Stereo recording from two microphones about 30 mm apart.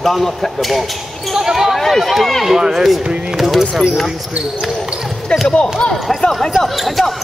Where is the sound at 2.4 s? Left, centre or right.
Centre.